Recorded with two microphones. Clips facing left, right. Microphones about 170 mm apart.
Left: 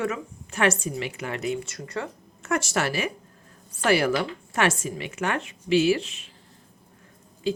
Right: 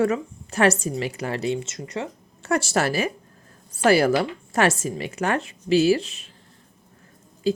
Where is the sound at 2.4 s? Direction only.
35° right (ahead or behind).